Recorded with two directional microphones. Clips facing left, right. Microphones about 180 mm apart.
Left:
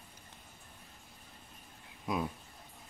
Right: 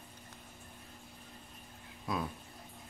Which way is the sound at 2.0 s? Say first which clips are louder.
Left 2 dB; 15° left (ahead or behind).